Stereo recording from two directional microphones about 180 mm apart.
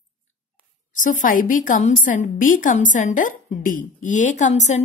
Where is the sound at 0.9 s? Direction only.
45° left (ahead or behind).